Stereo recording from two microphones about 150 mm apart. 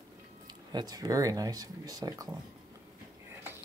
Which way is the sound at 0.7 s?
25° right (ahead or behind).